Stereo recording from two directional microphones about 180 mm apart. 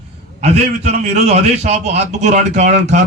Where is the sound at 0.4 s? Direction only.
35° right (ahead or behind).